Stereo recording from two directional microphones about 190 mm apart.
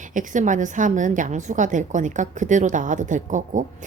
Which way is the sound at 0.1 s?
40° right (ahead or behind).